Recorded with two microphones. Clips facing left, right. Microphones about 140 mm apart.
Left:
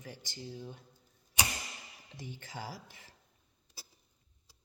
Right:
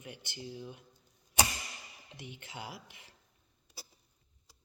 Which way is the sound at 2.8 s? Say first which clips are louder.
Left 1 dB; 15° right (ahead or behind).